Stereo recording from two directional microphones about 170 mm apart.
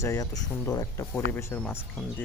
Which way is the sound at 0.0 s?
20° left (ahead or behind).